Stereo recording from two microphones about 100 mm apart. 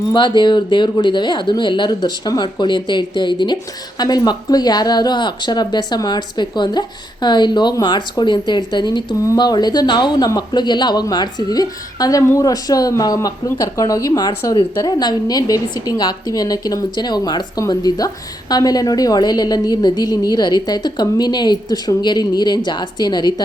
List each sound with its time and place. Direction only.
0.1 s speech: 50° left (ahead or behind)